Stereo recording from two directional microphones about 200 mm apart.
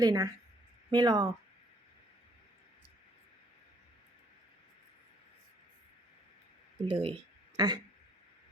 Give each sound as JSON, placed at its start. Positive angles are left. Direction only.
{"t": 0.0, "sound": "a woman's voice", "side_deg": -20}
{"t": 6.8, "sound": "speech", "side_deg": -25}